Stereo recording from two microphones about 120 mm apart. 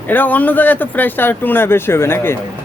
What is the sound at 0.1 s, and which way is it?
Speech, 15° left (ahead or behind).